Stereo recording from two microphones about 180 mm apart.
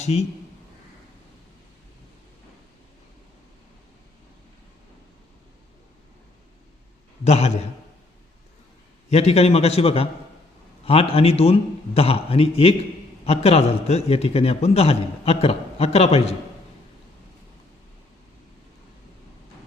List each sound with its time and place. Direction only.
0.0 s a man's voice: 35° left (ahead or behind)
7.3 s a man's voice: 35° left (ahead or behind)
9.0 s a man's voice: 35° left (ahead or behind)